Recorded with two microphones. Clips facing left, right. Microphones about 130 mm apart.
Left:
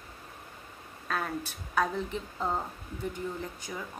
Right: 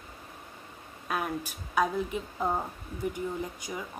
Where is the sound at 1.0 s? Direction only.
10° right (ahead or behind).